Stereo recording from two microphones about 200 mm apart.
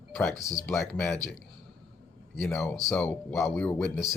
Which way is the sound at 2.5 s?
10° left (ahead or behind).